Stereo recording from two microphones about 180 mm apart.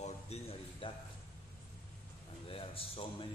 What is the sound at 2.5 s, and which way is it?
Speech, 30° left (ahead or behind).